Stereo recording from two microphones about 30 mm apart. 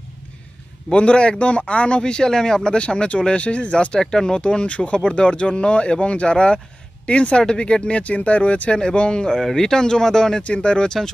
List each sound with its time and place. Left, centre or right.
0.9 s speech: left
4.0 s speech: centre
4.4 s speech: left
8.7 s speech: left
9.4 s speech: centre
10.4 s speech: left